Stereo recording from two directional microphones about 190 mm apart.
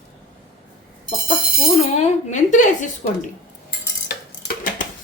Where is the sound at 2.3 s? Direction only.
40° left (ahead or behind).